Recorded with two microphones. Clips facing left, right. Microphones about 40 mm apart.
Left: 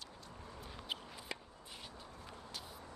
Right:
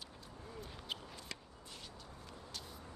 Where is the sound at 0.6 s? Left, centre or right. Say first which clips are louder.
Left 1 dB; centre.